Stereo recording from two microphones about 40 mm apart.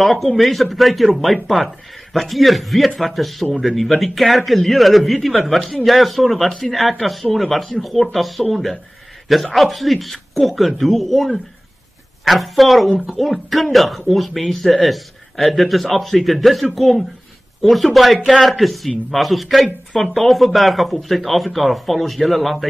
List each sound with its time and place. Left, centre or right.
0.0 s speech: centre
12.3 s speech: centre